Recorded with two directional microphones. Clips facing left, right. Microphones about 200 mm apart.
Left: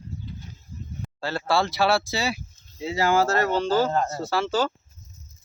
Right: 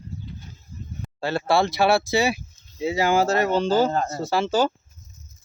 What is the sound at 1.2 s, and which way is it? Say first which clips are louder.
Speech: right 3 dB; 20° right (ahead or behind).